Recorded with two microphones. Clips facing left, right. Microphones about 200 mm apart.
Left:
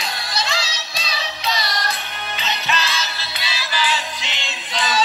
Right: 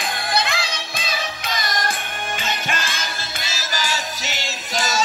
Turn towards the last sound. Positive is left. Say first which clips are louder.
# even
turn(degrees=-45)  # may be behind; listen again after turning